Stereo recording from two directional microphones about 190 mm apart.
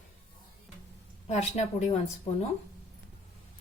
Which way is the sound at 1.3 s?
35° left (ahead or behind).